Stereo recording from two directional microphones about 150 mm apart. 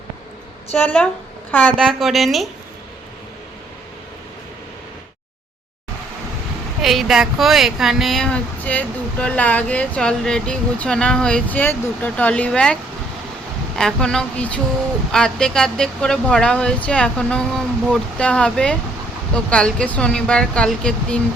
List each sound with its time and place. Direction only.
0.7 s speech: 10° left (ahead or behind)
6.8 s speech: centre (ahead or behind)